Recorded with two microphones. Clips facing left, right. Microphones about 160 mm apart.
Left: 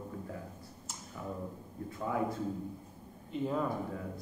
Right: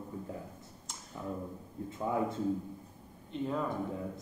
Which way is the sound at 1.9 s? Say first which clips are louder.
Right 1 dB; 25° right (ahead or behind).